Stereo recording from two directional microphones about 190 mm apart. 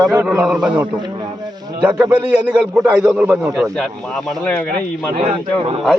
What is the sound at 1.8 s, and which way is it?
A man's voice, 10° right (ahead or behind).